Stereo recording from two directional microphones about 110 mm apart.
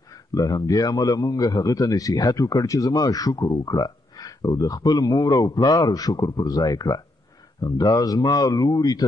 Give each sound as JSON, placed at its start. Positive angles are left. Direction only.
{"t": 0.3, "sound": "speech", "side_deg": 30}